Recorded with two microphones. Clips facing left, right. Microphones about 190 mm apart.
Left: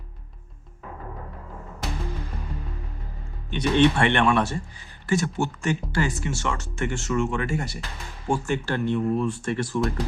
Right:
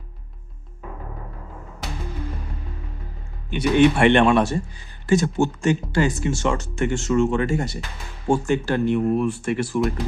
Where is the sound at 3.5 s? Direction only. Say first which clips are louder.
Right 3 dB; 10° right (ahead or behind).